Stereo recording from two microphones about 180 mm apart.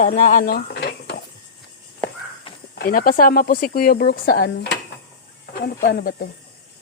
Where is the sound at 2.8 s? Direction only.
50° left (ahead or behind).